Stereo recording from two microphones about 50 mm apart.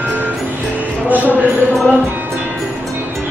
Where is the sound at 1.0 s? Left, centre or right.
Right.